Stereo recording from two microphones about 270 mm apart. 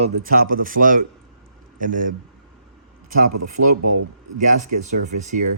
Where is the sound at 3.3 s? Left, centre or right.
Right.